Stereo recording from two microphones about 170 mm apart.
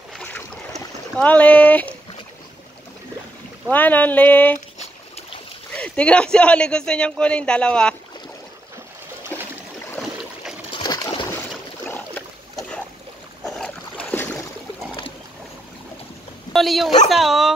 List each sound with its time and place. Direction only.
0.1 s boat: 10° left (ahead or behind)
1.1 s speech: 10° left (ahead or behind)
3.7 s speech: 10° left (ahead or behind)
4.7 s boat: 35° left (ahead or behind)
5.7 s a man's voice: 5° left (ahead or behind)
9.3 s a sound: 10° left (ahead or behind)
10.8 s a sound: 25° left (ahead or behind)
13.4 s boat: 5° left (ahead or behind)
16.5 s a man's voice: centre (ahead or behind)